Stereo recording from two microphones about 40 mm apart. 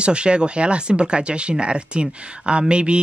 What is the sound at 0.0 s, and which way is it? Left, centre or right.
Speech, right.